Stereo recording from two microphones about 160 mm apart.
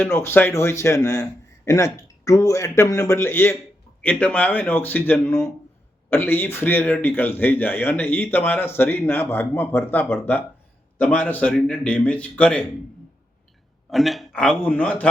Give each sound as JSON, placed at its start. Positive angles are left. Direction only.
{"t": 0.1, "sound": "a man's voice", "side_deg": 15}
{"t": 13.9, "sound": "speech", "side_deg": 0}